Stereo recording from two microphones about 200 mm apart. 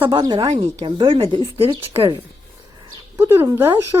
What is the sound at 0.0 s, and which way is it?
Speech, 25° right (ahead or behind).